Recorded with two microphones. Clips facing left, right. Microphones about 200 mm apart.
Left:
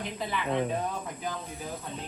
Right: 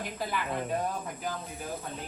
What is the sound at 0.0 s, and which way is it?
Speech, 5° right (ahead or behind).